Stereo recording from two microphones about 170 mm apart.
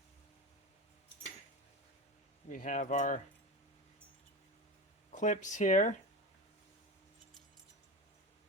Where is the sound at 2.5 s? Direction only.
50° left (ahead or behind).